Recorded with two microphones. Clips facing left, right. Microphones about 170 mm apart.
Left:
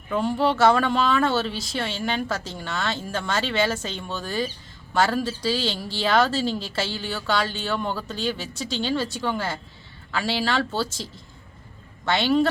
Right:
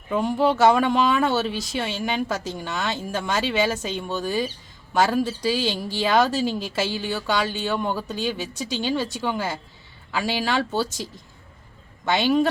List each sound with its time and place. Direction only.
0.1 s speech: 15° right (ahead or behind)